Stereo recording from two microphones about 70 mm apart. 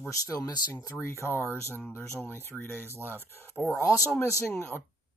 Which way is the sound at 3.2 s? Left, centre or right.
Left.